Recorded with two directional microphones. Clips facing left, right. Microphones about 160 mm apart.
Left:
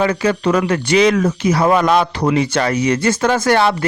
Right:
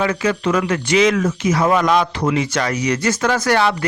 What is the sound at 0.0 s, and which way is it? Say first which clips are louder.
Speech: left 3 dB; 30° left (ahead or behind).